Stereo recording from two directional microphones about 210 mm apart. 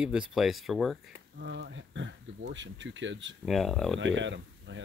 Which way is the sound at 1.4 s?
60° right (ahead or behind).